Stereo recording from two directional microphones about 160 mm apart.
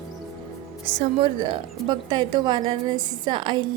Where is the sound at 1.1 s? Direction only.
30° right (ahead or behind).